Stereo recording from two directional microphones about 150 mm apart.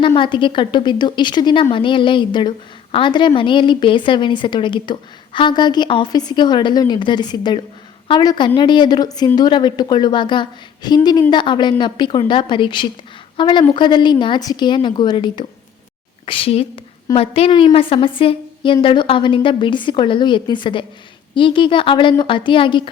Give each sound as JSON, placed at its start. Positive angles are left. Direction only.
{"t": 0.2, "sound": "a woman's voice", "side_deg": 35}